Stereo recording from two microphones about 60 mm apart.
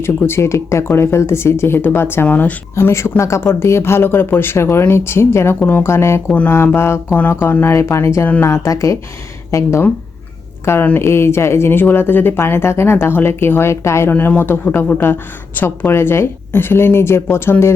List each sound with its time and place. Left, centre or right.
0.0 s speech: left
2.2 s speech: left
2.7 s speech: left
7.1 s a woman's voice: left
7.7 s speech: left
8.4 s a woman's voice: left
10.7 s speech: left
14.1 s a woman's voice: left